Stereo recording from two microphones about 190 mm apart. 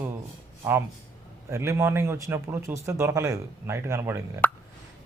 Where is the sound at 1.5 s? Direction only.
15° right (ahead or behind).